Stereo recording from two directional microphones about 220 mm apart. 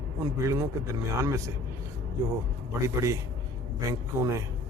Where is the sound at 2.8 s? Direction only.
15° right (ahead or behind).